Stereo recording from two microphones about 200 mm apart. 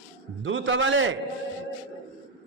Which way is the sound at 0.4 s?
70° right (ahead or behind).